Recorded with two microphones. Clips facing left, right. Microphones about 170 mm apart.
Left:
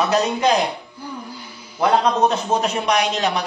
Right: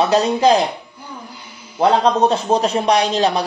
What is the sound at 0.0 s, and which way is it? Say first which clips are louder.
A man's voice: right 4 dB; 30° right (ahead or behind).